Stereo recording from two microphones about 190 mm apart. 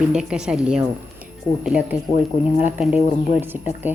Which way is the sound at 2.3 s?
50° left (ahead or behind).